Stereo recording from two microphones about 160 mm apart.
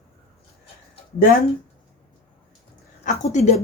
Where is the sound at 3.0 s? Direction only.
45° left (ahead or behind).